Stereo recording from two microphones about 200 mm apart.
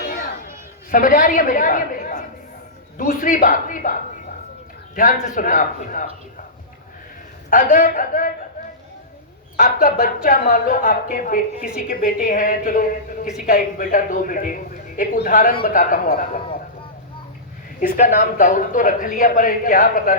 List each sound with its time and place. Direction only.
0.0 s a sound: 50° left (ahead or behind)
3.0 s a woman's voice: 40° left (ahead or behind)
5.2 s a man's voice: 40° left (ahead or behind)
7.5 s a woman's voice: 40° left (ahead or behind)
9.6 s a woman's voice: 45° left (ahead or behind)
17.7 s a woman's voice: 40° left (ahead or behind)